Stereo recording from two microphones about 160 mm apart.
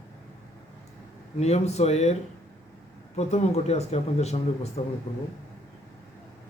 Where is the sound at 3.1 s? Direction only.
45° left (ahead or behind).